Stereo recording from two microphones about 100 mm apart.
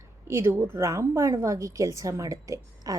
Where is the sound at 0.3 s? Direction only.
25° right (ahead or behind).